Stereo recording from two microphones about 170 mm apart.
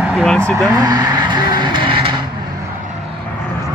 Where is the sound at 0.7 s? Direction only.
20° right (ahead or behind).